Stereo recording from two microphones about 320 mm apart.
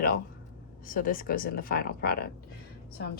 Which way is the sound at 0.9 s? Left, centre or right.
Left.